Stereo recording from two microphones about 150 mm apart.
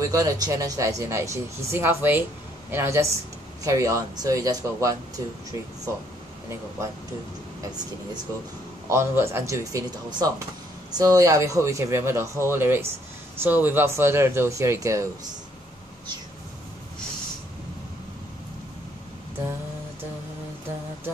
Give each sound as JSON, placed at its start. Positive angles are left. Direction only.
{"t": 0.0, "sound": "speech", "side_deg": -20}
{"t": 8.8, "sound": "speech", "side_deg": -15}